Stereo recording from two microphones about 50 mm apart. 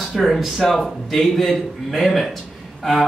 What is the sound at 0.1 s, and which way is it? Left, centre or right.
Speech, centre.